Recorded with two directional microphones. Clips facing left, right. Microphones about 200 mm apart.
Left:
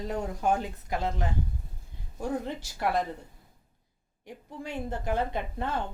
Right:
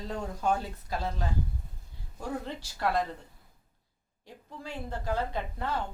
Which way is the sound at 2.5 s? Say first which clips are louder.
Left 1 dB; 15° left (ahead or behind).